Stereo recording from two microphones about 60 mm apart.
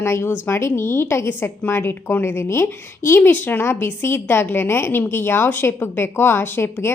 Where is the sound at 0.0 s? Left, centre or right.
Left.